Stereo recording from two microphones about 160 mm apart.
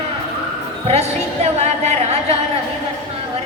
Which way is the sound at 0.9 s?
45° right (ahead or behind).